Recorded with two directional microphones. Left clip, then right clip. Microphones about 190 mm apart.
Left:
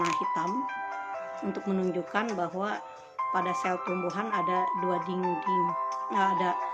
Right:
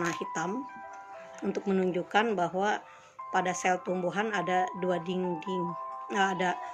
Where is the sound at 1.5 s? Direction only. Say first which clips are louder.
Right 2 dB; centre (ahead or behind).